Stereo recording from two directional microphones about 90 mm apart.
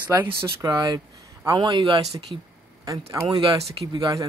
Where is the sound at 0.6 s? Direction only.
45° right (ahead or behind); by 2.0 s 65° right (ahead or behind).